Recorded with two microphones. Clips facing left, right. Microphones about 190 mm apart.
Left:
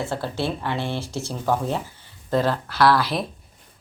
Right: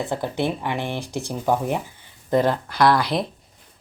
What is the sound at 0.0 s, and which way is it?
Speech, 15° right (ahead or behind).